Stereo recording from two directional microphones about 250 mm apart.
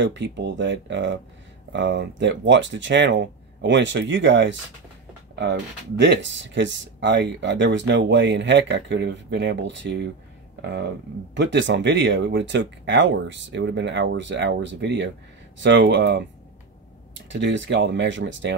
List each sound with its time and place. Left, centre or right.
0.0 s speech: right
17.3 s speech: right